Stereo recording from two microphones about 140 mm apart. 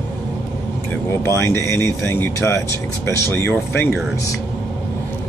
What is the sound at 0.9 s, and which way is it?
Speech, 20° left (ahead or behind).